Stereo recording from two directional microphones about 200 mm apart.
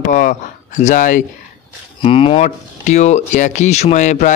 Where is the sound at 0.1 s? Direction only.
40° left (ahead or behind).